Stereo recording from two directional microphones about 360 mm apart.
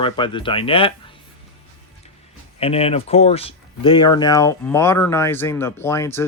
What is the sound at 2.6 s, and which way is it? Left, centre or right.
Speech, centre.